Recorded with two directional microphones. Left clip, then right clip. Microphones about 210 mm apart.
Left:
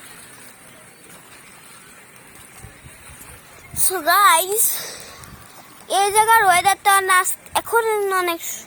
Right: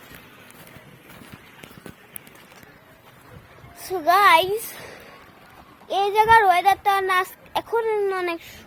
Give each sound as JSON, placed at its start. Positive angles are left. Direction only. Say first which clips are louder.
{"t": 4.0, "sound": "speech", "louder": "left 1 dB", "side_deg": 10}